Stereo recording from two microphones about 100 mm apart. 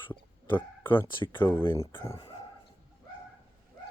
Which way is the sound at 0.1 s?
20° left (ahead or behind).